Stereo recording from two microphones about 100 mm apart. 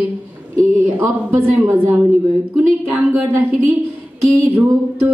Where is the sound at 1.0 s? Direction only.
20° right (ahead or behind).